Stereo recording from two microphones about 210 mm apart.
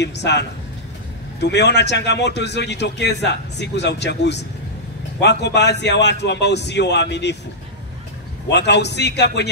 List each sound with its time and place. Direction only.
0.0 s a man's voice: 55° left (ahead or behind)
8.5 s a man's voice: 55° left (ahead or behind)